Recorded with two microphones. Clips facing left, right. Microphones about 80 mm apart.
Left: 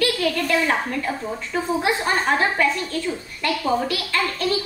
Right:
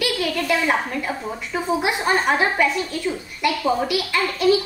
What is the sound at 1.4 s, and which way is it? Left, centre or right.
A woman's voice, centre.